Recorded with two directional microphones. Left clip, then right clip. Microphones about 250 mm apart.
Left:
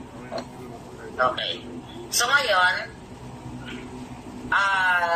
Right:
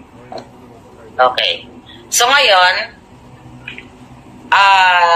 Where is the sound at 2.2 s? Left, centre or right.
Right.